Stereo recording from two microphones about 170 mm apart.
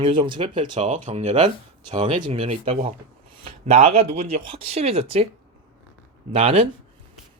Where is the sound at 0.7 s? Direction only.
45° right (ahead or behind).